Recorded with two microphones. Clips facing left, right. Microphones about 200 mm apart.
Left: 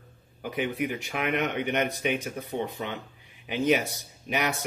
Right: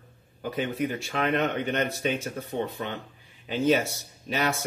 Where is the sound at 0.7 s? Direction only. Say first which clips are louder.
Right 1 dB; 45° right (ahead or behind).